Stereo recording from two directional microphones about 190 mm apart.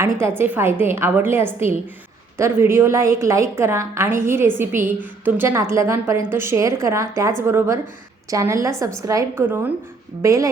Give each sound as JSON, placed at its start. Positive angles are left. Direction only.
{"t": 0.2, "sound": "a woman's voice", "side_deg": -10}